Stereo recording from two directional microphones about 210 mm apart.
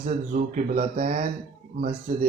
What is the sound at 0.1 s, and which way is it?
Speech, 35° right (ahead or behind).